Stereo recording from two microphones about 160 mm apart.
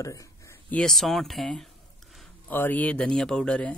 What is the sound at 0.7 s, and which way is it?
Speech, centre (ahead or behind).